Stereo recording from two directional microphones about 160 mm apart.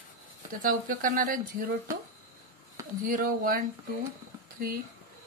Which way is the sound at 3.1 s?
60° right (ahead or behind).